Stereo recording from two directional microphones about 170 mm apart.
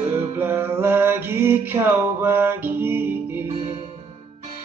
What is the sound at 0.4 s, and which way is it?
Mantra, 10° right (ahead or behind).